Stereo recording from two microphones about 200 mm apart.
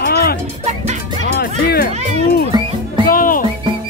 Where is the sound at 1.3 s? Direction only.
50° left (ahead or behind).